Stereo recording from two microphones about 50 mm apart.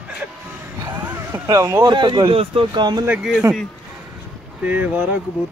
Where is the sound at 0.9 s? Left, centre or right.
Right.